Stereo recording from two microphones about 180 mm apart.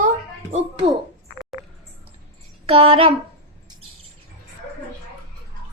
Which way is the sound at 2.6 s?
30° right (ahead or behind).